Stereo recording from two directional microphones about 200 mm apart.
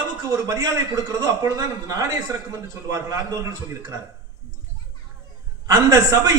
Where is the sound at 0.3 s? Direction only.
15° right (ahead or behind).